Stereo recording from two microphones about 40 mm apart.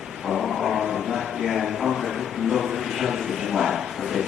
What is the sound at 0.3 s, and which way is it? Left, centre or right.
Chant, centre.